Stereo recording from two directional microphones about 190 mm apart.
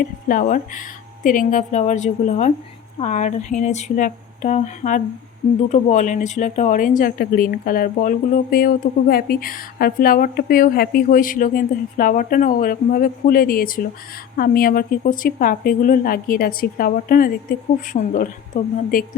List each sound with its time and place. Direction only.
0.0 s speech: 45° left (ahead or behind)